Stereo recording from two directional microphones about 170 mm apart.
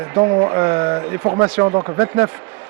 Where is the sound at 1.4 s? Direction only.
20° right (ahead or behind).